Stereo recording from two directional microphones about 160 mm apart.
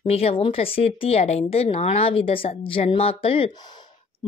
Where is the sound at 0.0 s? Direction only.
35° left (ahead or behind).